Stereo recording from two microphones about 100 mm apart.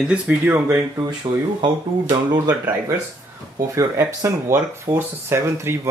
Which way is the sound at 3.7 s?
30° right (ahead or behind).